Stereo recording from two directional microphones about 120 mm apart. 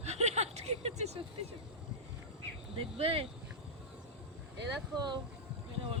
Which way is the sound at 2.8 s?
55° right (ahead or behind).